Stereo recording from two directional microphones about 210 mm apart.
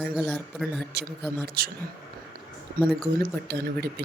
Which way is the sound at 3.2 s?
50° right (ahead or behind).